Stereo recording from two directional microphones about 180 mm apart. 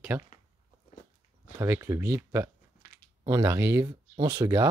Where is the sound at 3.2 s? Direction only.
20° right (ahead or behind).